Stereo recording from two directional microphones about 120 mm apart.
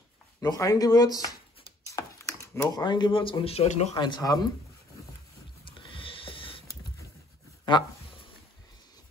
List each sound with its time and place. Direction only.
0.4 s speech: 30° left (ahead or behind)
2.0 s typing: 25° left (ahead or behind)
2.8 s a man's voice: 40° left (ahead or behind); by 3.9 s 70° left (ahead or behind)
3.9 s speech: 35° left (ahead or behind)
5.7 s a sound: 45° left (ahead or behind)